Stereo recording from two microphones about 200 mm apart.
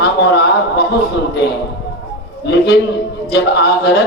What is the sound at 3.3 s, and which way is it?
Speech, 55° left (ahead or behind).